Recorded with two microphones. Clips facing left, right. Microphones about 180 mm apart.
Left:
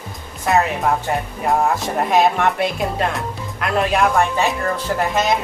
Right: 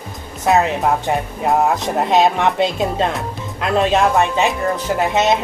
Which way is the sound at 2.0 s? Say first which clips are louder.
Right 1 dB; 20° right (ahead or behind).